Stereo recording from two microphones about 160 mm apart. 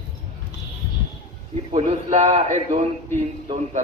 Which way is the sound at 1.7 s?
45° right (ahead or behind).